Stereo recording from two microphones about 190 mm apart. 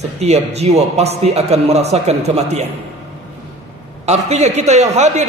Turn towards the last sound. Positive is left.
turn(degrees=-35)  # may be behind; listen again after turning